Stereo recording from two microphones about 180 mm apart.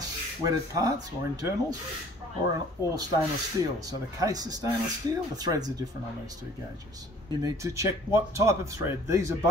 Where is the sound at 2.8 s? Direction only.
20° left (ahead or behind).